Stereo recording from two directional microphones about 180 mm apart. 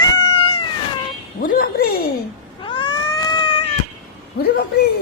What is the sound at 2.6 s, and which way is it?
Cat, 25° left (ahead or behind).